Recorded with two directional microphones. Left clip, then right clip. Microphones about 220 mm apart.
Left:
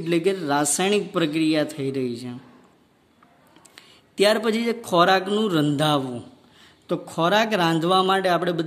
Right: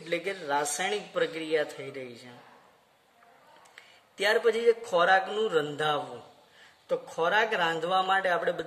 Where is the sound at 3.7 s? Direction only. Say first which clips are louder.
Left 13 dB; 50° left (ahead or behind).